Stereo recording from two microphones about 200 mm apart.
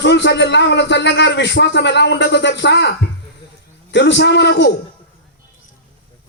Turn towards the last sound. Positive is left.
turn(degrees=60)  # may be behind; listen again after turning